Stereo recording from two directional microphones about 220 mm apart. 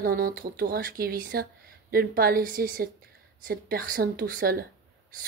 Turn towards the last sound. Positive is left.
turn(degrees=-40)  # may be behind; listen again after turning